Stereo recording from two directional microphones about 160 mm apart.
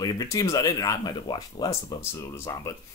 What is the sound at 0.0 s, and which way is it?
Speech, 25° left (ahead or behind).